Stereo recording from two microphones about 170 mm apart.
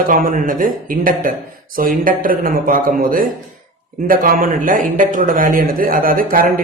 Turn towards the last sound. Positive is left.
turn(degrees=-55)  # may be behind; listen again after turning